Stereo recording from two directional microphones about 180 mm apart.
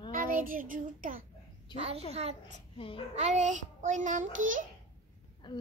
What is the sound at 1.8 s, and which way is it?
A child's voice, 35° right (ahead or behind).